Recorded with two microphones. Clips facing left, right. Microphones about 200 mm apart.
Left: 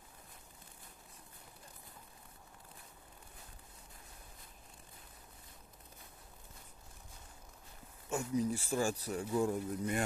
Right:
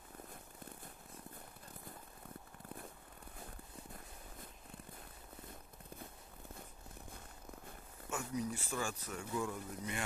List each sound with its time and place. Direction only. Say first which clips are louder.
8.1 s speech: left 6 dB; 35° left (ahead or behind)